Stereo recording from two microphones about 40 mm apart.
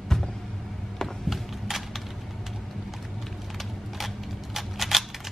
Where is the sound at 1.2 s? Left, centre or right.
Centre.